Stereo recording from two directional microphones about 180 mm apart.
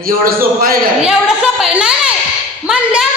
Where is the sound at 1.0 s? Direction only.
5° right (ahead or behind).